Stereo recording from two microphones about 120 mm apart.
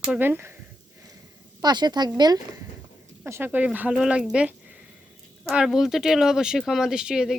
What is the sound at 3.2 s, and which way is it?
Speech, 20° right (ahead or behind).